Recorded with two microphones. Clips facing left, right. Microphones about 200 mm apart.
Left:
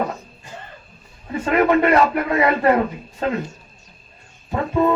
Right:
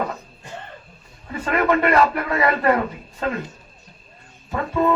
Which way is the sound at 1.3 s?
20° left (ahead or behind).